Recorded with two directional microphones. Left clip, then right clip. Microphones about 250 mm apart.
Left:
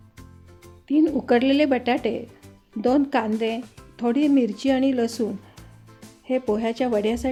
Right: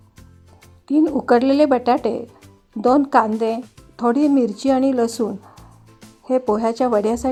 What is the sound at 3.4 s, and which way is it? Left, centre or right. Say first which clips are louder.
A woman's voice: right 5 dB; centre.